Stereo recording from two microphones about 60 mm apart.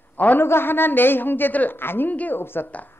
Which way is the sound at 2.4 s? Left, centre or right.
Left.